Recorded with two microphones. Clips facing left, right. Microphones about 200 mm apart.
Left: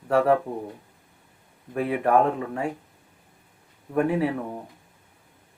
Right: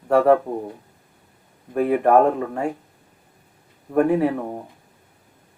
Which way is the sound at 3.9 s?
45° right (ahead or behind).